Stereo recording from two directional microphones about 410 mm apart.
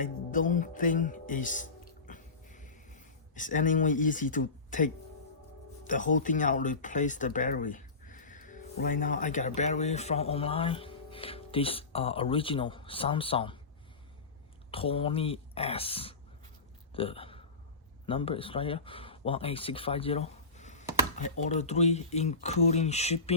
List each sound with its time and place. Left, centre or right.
0.0 s music: centre
5.8 s speech: centre
14.7 s speech: centre